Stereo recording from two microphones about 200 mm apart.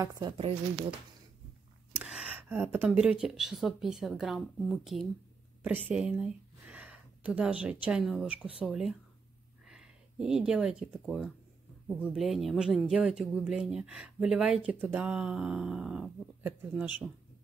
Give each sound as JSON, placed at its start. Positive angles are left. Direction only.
{"t": 0.0, "sound": "a woman's voice", "side_deg": -15}
{"t": 0.4, "sound": "speech", "side_deg": -30}
{"t": 2.0, "sound": "speech", "side_deg": -5}
{"t": 9.7, "sound": "speech", "side_deg": -5}